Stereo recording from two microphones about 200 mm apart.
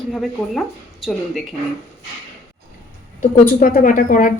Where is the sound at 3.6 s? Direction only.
45° left (ahead or behind).